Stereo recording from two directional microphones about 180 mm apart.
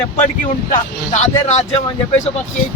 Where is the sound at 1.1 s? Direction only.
40° left (ahead or behind).